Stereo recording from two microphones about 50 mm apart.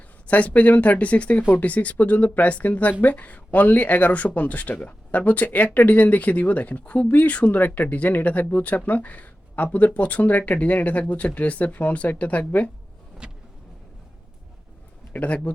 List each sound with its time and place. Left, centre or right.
0.3 s speech: left
13.2 s vehicle: centre
15.1 s speech: left